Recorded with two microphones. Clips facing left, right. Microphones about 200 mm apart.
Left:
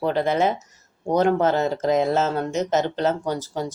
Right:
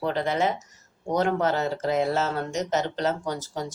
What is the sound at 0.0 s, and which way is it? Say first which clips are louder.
Speech: left 4 dB; 20° left (ahead or behind).